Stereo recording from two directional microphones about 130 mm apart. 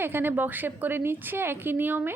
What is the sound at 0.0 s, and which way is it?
A woman's voice, 15° right (ahead or behind).